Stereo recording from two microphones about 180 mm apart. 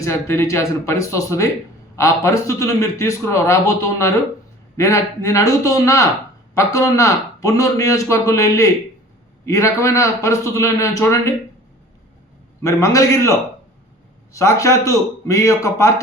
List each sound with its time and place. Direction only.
0.0 s a man's voice: 15° left (ahead or behind)
12.6 s a man's voice: 20° left (ahead or behind)
14.3 s a man's voice: 15° left (ahead or behind)